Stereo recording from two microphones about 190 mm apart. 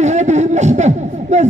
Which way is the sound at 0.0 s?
35° right (ahead or behind).